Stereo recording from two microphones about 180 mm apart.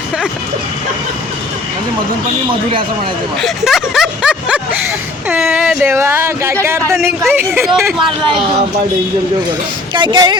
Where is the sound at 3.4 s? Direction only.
Centre (ahead or behind).